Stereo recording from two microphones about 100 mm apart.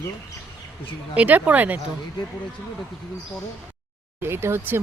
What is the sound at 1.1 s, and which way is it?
Speech, 15° right (ahead or behind).